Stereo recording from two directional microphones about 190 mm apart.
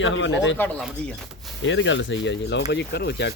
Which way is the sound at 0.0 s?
75° left (ahead or behind).